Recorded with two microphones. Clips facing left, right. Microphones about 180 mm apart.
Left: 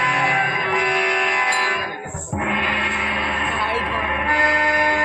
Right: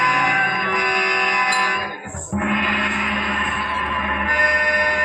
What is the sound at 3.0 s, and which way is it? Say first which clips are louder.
Music: right 1 dB; 30° left (ahead or behind).